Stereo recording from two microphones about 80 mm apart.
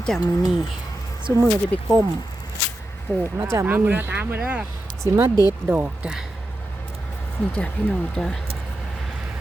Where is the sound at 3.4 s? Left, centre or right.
Right.